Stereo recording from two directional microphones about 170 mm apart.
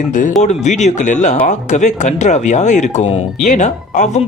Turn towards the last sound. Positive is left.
turn(degrees=45)  # may be behind; listen again after turning